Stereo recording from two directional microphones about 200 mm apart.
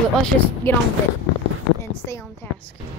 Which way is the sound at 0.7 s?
10° left (ahead or behind).